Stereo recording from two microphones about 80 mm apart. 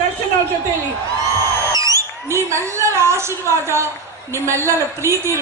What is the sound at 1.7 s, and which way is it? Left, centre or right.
A woman's voice, right.